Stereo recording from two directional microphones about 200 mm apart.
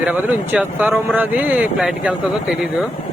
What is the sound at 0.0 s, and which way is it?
Speech, 5° right (ahead or behind).